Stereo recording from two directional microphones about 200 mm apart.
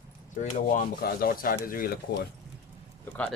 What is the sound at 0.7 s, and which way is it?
Speech, 45° left (ahead or behind).